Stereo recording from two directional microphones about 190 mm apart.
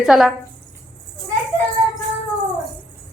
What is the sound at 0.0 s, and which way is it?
Speech, centre (ahead or behind).